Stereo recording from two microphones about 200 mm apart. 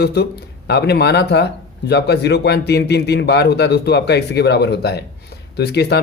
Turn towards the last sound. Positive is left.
turn(degrees=55)  # may be behind; listen again after turning